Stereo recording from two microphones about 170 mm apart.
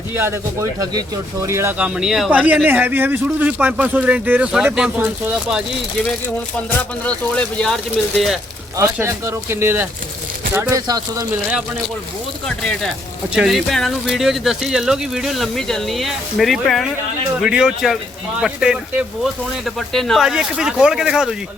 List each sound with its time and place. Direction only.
0.1 s speech: 15° right (ahead or behind)
2.0 s speech: centre (ahead or behind)
7.0 s speech: 5° left (ahead or behind)
8.8 s speech: 15° right (ahead or behind)
12.5 s speech: 5° left (ahead or behind)